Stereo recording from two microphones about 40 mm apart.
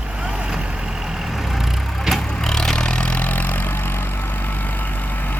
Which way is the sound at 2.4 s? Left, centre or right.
Centre.